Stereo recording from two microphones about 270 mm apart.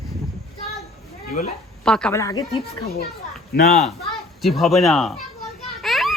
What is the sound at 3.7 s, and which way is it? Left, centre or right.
Speech, centre.